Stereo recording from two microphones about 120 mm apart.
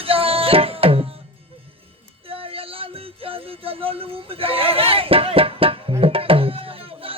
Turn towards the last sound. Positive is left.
turn(degrees=-50)  # may be behind; listen again after turning